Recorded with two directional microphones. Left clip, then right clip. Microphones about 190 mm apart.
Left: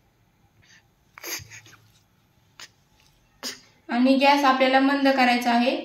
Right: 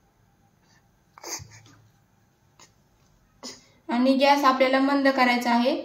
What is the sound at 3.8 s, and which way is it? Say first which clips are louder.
A woman's voice: left 1 dB; 40° right (ahead or behind).